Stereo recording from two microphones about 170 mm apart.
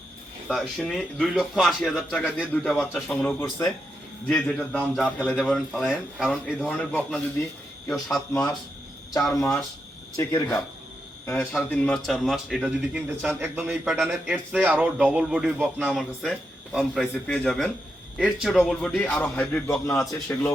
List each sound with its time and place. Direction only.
0.4 s a man's voice: 5° left (ahead or behind)
9.3 s a man's voice: 15° left (ahead or behind)
11.3 s a man's voice: 5° left (ahead or behind)